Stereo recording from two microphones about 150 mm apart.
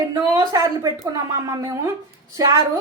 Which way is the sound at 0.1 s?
25° right (ahead or behind).